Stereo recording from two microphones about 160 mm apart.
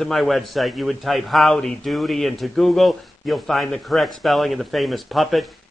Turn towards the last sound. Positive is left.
turn(degrees=0)  # may be behind; listen again after turning